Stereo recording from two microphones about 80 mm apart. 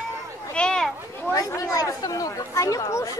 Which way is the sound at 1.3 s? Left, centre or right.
Left.